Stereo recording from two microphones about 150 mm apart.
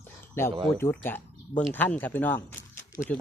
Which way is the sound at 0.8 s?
15° left (ahead or behind).